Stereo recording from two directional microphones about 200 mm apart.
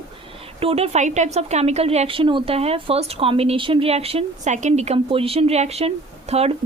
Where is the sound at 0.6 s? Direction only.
30° right (ahead or behind).